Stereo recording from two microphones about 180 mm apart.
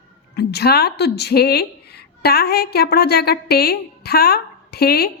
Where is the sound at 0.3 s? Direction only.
60° left (ahead or behind).